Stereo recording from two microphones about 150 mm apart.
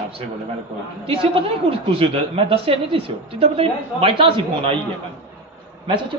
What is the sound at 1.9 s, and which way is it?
A woman's voice, 40° right (ahead or behind).